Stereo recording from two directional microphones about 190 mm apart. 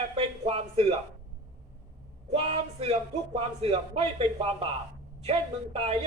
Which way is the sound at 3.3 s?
30° right (ahead or behind).